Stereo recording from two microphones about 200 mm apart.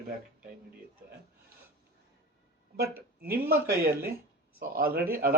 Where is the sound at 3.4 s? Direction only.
50° right (ahead or behind).